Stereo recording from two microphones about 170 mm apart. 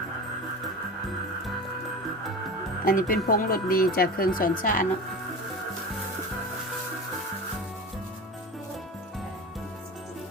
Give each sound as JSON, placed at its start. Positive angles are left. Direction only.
{"t": 2.8, "sound": "speech", "side_deg": 55}